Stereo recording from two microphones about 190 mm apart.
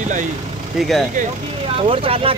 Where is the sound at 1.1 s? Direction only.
35° right (ahead or behind).